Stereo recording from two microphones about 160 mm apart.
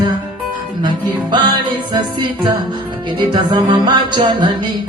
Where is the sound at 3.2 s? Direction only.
30° right (ahead or behind).